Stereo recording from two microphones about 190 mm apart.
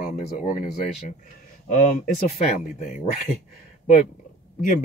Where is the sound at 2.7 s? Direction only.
45° left (ahead or behind).